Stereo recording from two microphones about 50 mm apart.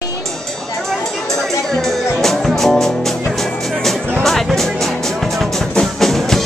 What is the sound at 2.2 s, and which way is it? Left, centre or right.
Music, centre.